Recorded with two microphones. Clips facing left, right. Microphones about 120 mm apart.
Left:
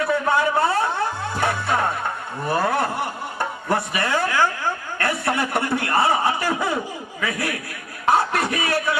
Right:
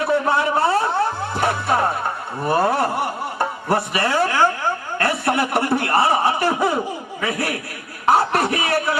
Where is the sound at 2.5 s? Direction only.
30° right (ahead or behind).